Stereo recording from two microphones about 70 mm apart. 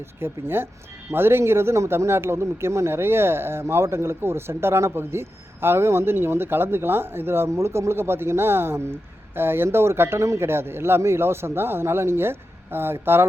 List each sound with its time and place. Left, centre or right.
0.2 s speech: right